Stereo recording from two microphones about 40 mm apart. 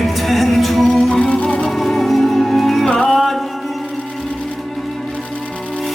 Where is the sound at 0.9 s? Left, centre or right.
Centre.